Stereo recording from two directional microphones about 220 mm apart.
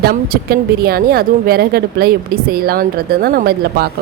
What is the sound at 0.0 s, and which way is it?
A woman's voice, 45° right (ahead or behind).